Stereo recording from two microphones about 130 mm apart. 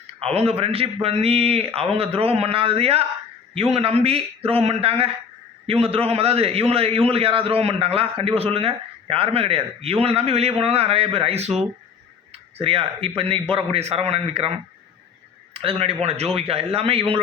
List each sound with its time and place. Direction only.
0.3 s a man's voice: 50° right (ahead or behind)
12.5 s a man's voice: 45° right (ahead or behind)
15.5 s a man's voice: 45° right (ahead or behind)